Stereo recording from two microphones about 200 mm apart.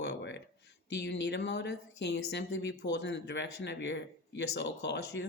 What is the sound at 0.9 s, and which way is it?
Speech, 60° left (ahead or behind).